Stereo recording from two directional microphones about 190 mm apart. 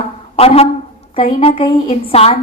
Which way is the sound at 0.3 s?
30° left (ahead or behind).